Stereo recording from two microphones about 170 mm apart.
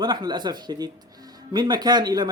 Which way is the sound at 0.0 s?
25° right (ahead or behind).